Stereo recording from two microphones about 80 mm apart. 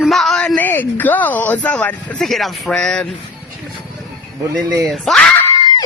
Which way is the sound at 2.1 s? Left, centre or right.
Centre.